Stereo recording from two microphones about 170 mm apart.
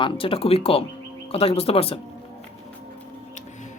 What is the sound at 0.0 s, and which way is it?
Speech, 30° left (ahead or behind).